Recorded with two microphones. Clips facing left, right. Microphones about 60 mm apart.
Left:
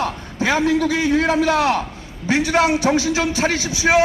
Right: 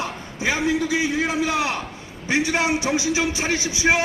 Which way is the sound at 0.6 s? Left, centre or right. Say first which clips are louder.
Left 4 dB; centre.